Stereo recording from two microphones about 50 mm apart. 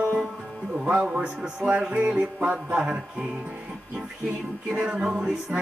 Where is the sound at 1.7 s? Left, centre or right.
Right.